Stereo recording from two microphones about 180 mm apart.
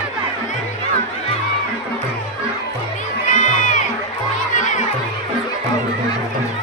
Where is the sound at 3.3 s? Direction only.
45° left (ahead or behind).